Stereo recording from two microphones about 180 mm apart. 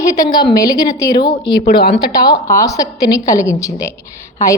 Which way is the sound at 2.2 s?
20° left (ahead or behind).